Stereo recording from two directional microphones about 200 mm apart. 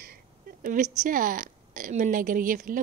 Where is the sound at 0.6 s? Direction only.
40° right (ahead or behind).